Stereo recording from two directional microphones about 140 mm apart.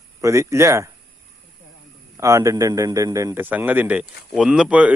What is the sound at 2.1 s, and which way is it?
A man's voice, 25° right (ahead or behind).